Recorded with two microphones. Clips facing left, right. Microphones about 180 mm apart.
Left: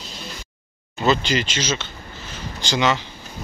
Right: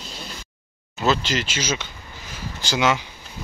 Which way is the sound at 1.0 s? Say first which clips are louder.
Left 2 dB; centre (ahead or behind).